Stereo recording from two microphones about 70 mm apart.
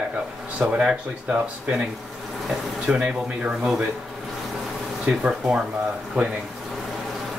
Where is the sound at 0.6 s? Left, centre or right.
Centre.